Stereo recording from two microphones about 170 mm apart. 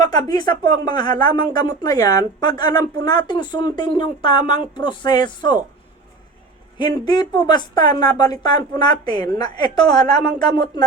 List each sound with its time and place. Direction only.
0.0 s speech: 25° left (ahead or behind)
6.7 s speech: 25° left (ahead or behind)